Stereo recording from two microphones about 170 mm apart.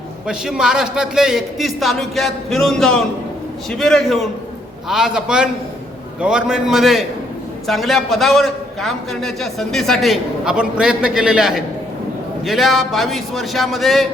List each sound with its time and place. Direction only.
0.3 s a man's voice: 5° right (ahead or behind)